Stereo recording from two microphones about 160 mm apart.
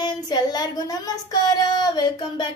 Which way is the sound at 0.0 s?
25° left (ahead or behind).